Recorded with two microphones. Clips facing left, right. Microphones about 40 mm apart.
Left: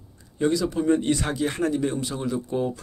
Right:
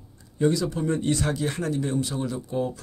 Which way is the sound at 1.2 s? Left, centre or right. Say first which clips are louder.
Left 1 dB; left.